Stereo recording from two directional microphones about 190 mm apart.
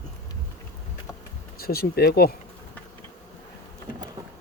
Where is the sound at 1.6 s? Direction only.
55° left (ahead or behind).